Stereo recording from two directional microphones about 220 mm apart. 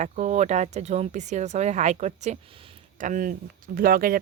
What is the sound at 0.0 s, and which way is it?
A woman's voice, 30° right (ahead or behind).